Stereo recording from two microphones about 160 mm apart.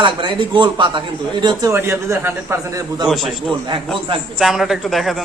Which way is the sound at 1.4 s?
20° right (ahead or behind).